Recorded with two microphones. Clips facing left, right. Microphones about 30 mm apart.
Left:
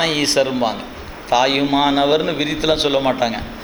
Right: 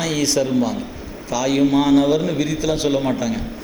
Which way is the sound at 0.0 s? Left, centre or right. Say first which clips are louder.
Left 3 dB; left.